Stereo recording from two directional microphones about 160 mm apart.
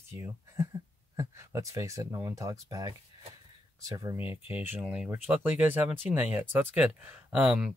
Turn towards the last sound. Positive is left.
turn(degrees=-5)  # may be behind; listen again after turning